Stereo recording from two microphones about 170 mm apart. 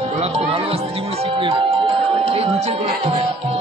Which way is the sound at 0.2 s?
35° right (ahead or behind).